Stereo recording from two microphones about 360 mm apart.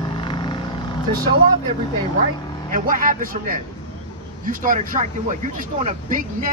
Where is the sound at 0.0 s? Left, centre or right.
Centre.